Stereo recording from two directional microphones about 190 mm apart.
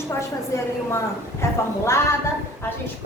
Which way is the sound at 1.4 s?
15° left (ahead or behind).